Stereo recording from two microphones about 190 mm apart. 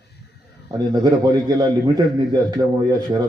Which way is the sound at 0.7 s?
20° right (ahead or behind).